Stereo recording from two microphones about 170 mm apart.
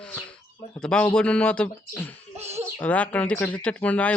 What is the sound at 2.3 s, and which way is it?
Speech, 40° right (ahead or behind).